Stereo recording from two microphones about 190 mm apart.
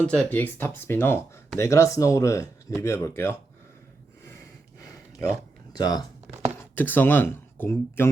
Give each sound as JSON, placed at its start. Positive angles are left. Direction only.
{"t": 0.0, "sound": "speech", "side_deg": 5}
{"t": 5.7, "sound": "speech", "side_deg": 20}
{"t": 6.7, "sound": "speech", "side_deg": 10}